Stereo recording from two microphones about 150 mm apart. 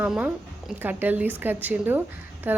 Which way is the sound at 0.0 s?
10° right (ahead or behind).